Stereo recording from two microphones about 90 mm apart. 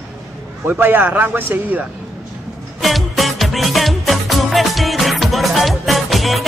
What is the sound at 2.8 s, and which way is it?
Music, centre (ahead or behind).